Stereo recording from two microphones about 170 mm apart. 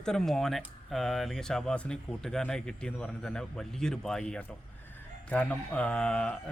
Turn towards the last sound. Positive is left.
turn(degrees=5)  # may be behind; listen again after turning